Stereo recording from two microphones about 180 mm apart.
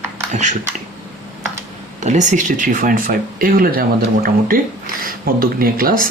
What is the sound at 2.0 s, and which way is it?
Speech, 40° right (ahead or behind).